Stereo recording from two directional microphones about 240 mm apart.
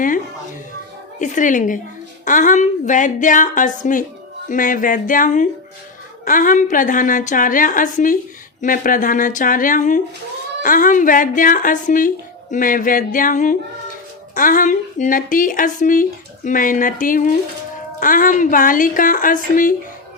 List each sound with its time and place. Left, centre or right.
1.2 s speech: left